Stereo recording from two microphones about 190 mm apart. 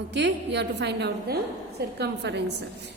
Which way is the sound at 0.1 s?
65° right (ahead or behind).